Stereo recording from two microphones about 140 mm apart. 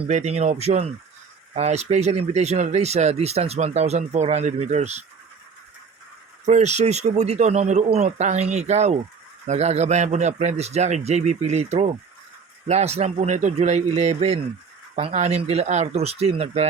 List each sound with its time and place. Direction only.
0.1 s speech: 50° right (ahead or behind)
6.4 s speech: 55° right (ahead or behind)